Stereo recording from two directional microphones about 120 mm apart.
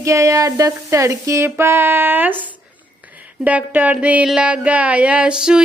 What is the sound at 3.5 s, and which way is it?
Speech, 15° right (ahead or behind).